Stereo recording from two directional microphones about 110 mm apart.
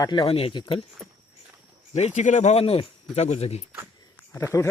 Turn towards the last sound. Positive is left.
turn(degrees=30)  # may be behind; listen again after turning